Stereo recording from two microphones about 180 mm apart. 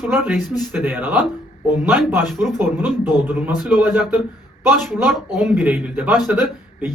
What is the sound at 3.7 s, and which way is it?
A man's voice, 10° right (ahead or behind).